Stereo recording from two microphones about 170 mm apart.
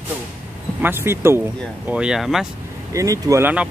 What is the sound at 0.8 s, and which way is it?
Speech, 15° right (ahead or behind).